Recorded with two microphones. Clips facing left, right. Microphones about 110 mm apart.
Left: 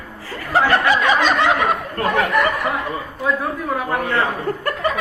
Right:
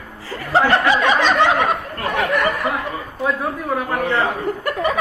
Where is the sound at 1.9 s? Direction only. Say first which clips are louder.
Left 3 dB; 35° left (ahead or behind).